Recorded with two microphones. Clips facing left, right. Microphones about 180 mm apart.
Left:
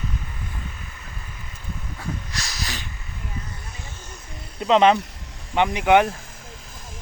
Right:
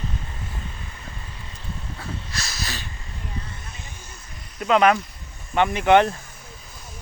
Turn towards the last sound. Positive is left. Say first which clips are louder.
# right 1 dB
turn(degrees=10)  # may be behind; listen again after turning